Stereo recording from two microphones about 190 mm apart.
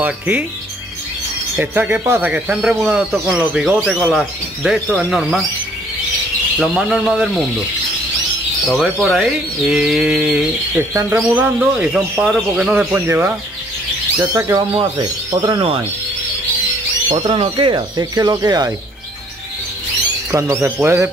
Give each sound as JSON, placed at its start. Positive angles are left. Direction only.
{"t": 0.0, "sound": "a man's voice", "side_deg": -10}
{"t": 1.6, "sound": "speech", "side_deg": -10}
{"t": 4.2, "sound": "speech", "side_deg": -5}
{"t": 6.6, "sound": "speech", "side_deg": 0}
{"t": 8.6, "sound": "speech", "side_deg": 0}
{"t": 17.1, "sound": "speech", "side_deg": -25}
{"t": 20.2, "sound": "a man's voice", "side_deg": -15}